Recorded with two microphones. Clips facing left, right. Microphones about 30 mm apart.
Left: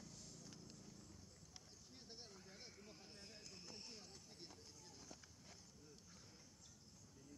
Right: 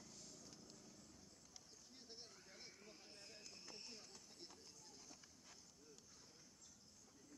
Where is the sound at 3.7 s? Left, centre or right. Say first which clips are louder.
Even; centre.